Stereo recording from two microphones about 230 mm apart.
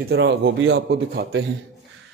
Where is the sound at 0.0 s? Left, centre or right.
Right.